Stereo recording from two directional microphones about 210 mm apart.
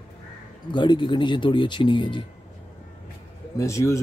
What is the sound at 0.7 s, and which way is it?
Speech, 20° left (ahead or behind).